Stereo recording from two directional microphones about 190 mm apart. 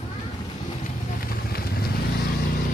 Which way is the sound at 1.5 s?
55° left (ahead or behind).